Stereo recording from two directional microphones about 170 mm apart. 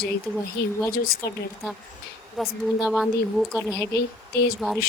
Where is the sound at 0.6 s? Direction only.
70° left (ahead or behind).